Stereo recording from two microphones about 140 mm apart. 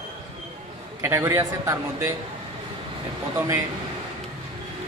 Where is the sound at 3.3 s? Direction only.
15° right (ahead or behind).